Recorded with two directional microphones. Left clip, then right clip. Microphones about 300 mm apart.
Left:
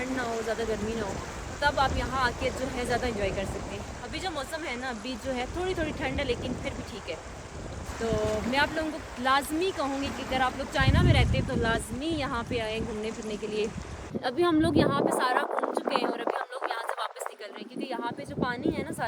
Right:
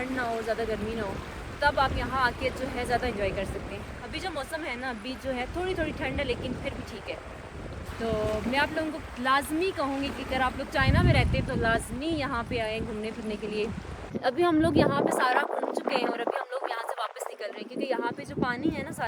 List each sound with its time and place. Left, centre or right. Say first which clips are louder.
0.2 s speech: right 2 dB; centre
8.5 s speech: even; centre